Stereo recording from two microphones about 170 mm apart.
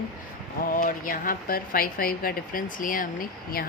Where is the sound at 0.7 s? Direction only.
50° left (ahead or behind).